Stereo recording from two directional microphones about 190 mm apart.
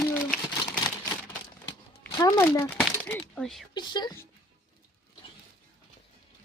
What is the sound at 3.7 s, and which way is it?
Speech, 25° left (ahead or behind).